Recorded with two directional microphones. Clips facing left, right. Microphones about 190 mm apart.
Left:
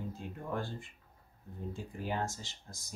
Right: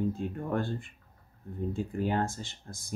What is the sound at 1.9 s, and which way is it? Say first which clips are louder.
Speech: right 5 dB; 60° right (ahead or behind).